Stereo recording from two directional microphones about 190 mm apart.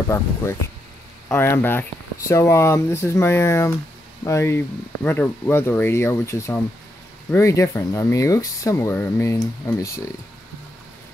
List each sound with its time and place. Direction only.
1.3 s speech: 10° left (ahead or behind)